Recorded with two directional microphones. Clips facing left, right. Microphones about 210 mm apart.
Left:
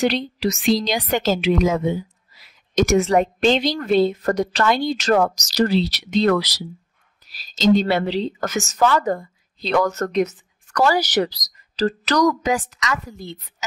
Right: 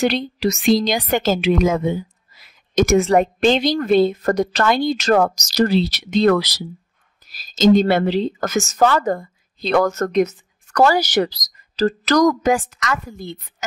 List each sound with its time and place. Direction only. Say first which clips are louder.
0.1 s a woman's voice: right 2 dB; 45° right (ahead or behind)
7.5 s a woman's voice: right 3 dB; 45° right (ahead or behind)